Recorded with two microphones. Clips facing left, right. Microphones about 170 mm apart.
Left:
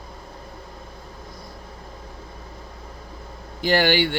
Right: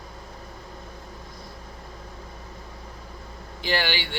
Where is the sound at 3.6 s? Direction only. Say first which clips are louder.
Left 8 dB; 45° left (ahead or behind).